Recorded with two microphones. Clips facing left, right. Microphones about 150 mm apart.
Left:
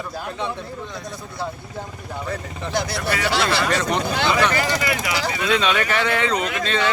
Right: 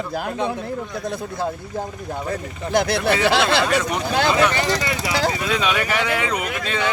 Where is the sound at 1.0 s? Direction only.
55° right (ahead or behind).